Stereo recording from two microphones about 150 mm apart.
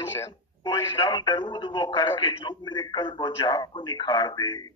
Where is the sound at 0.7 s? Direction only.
30° left (ahead or behind).